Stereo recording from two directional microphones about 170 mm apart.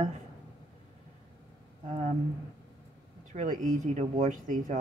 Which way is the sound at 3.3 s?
45° right (ahead or behind).